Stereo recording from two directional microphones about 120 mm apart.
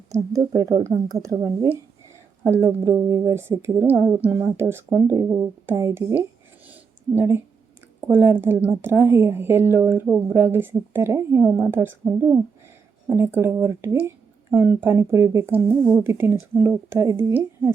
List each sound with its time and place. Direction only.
0.1 s a woman's voice: 30° right (ahead or behind)
3.8 s speech: 15° right (ahead or behind)
6.7 s a sound: 15° right (ahead or behind)
8.0 s speech: 15° right (ahead or behind)